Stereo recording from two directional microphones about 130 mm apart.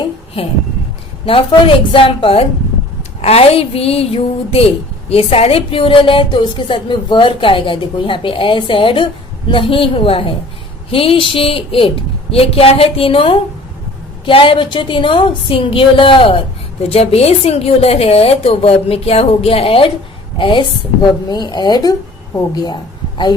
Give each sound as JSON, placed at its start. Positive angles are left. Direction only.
{"t": 1.2, "sound": "a woman's voice", "side_deg": 45}